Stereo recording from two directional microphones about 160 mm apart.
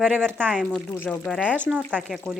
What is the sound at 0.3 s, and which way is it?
Speech, 10° right (ahead or behind).